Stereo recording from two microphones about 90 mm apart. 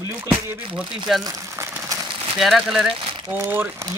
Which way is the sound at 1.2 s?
40° right (ahead or behind).